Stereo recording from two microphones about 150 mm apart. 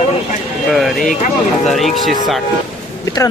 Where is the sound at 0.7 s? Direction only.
Centre (ahead or behind).